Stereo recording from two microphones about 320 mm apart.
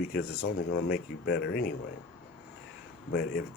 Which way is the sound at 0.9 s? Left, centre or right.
Left.